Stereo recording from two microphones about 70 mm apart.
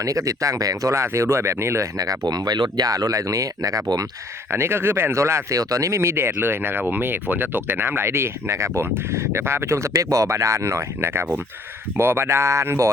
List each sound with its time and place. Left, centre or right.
0.0 s speech: right
2.0 s speech: right
4.5 s speech: right